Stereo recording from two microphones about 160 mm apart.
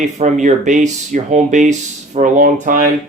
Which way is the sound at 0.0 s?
50° right (ahead or behind).